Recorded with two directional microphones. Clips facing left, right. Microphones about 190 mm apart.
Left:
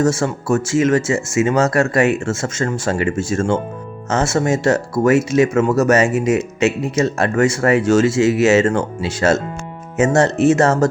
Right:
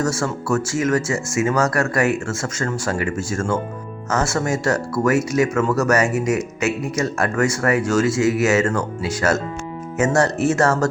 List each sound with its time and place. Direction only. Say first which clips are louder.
0.0 s speech: left 5 dB; 25° left (ahead or behind)